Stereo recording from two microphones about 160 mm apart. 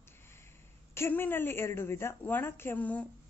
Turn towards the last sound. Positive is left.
turn(degrees=10)  # may be behind; listen again after turning